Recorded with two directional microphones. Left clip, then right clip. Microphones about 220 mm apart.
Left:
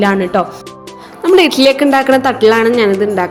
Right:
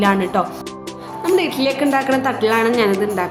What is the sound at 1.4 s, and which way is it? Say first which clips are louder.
A woman's voice: left 9 dB; 30° left (ahead or behind).